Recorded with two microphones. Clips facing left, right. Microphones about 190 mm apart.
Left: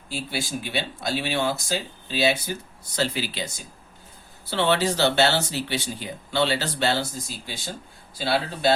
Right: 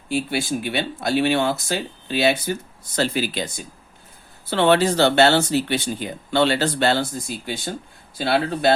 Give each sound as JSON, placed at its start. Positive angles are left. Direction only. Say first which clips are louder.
{"t": 0.1, "sound": "speech", "louder": "right 7 dB", "side_deg": -55}
{"t": 4.4, "sound": "speech", "louder": "right 5 dB", "side_deg": -55}